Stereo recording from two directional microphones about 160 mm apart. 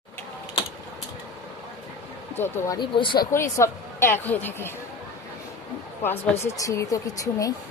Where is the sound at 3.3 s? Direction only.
20° left (ahead or behind).